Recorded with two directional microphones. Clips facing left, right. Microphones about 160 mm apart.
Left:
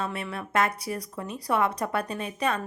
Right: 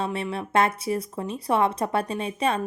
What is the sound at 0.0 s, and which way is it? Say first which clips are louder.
A woman's voice: right 4 dB; 25° right (ahead or behind).